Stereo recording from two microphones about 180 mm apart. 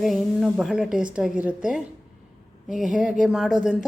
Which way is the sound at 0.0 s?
Centre (ahead or behind).